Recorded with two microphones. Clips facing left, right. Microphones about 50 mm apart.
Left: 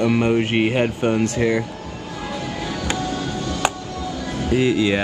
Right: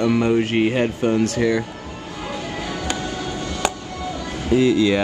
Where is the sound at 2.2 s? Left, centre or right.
Right.